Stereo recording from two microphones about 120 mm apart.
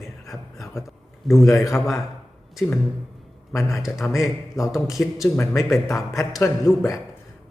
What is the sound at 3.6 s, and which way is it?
A man's voice, centre (ahead or behind).